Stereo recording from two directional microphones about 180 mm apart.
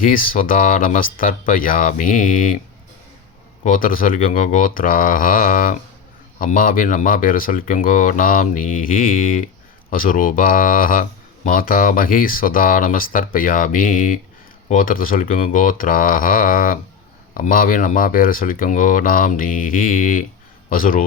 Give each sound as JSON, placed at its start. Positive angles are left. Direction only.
{"t": 0.0, "sound": "speech", "side_deg": 50}
{"t": 3.6, "sound": "speech", "side_deg": 50}